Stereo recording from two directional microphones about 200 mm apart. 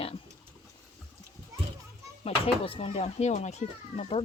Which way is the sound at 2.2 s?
30° left (ahead or behind).